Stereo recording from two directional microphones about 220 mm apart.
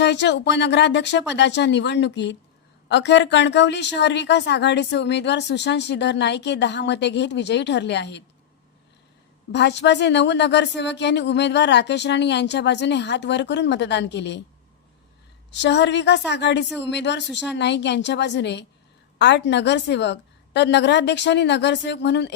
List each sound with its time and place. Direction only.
0.0 s a woman's voice: 55° left (ahead or behind)
9.5 s a woman's voice: 50° left (ahead or behind)
15.5 s a woman's voice: 50° left (ahead or behind)